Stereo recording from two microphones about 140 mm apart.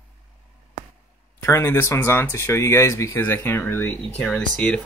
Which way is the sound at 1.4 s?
15° left (ahead or behind).